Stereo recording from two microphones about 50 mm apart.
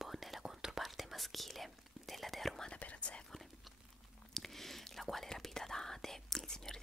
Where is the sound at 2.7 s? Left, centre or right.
Left.